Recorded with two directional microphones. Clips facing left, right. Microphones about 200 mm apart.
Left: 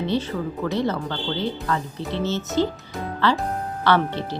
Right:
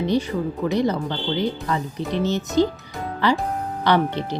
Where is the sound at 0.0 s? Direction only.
15° right (ahead or behind).